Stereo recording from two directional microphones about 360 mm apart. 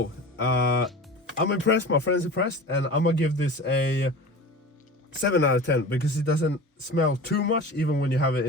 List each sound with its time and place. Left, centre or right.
0.4 s speech: left
5.2 s speech: left